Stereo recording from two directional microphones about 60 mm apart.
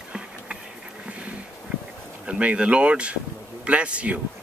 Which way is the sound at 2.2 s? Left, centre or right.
Centre.